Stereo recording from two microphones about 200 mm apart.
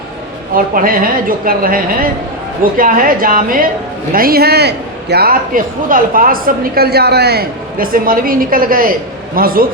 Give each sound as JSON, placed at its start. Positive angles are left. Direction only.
{"t": 0.5, "sound": "a man's voice", "side_deg": -45}